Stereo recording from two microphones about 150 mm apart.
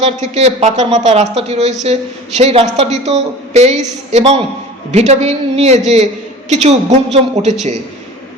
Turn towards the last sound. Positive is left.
turn(degrees=-45)  # may be behind; listen again after turning